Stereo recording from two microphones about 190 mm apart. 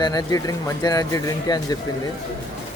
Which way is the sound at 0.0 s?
20° left (ahead or behind).